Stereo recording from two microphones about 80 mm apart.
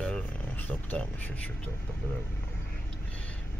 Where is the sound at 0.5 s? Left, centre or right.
Left.